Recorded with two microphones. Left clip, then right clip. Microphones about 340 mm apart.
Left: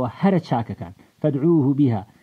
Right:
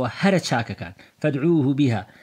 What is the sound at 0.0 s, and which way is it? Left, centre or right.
Speech, centre.